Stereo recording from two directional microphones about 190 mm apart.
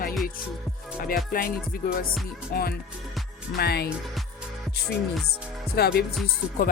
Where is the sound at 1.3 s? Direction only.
50° left (ahead or behind).